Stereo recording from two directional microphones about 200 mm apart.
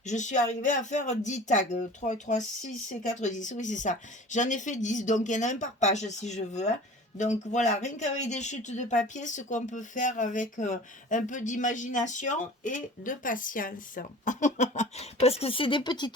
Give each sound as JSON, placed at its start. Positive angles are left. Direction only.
{"t": 0.0, "sound": "speech", "side_deg": 35}